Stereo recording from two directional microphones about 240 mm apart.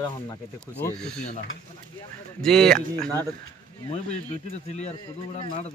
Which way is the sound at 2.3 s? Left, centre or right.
Centre.